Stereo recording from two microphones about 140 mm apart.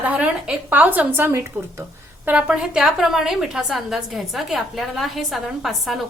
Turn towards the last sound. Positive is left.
turn(degrees=0)  # may be behind; listen again after turning